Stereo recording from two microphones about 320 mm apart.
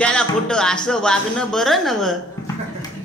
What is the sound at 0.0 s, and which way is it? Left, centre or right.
A man's voice, centre.